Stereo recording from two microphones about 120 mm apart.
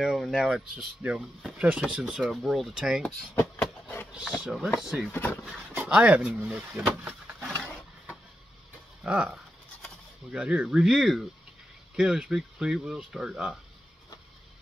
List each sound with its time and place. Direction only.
0.0 s speech: centre (ahead or behind)
4.1 s speech: 10° right (ahead or behind)
5.1 s speech: 15° left (ahead or behind)
5.7 s speech: 15° right (ahead or behind)
7.5 s a sound: 10° left (ahead or behind)
9.0 s speech: 10° right (ahead or behind)